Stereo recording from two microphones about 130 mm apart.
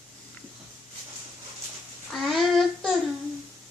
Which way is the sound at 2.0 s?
Centre (ahead or behind).